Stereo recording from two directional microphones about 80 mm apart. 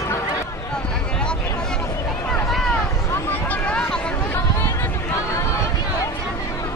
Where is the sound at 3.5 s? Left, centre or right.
Left.